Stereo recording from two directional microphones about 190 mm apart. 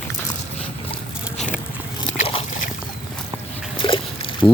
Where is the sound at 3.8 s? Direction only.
25° left (ahead or behind).